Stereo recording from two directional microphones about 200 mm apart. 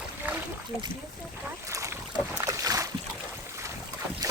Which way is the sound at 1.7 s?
15° right (ahead or behind).